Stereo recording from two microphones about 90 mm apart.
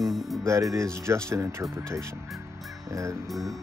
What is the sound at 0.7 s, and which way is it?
Speech, 30° right (ahead or behind).